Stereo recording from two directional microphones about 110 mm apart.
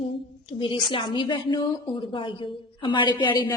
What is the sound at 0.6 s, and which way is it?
A woman's voice, 50° left (ahead or behind).